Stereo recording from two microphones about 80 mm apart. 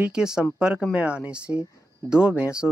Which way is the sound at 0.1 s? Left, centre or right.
Centre.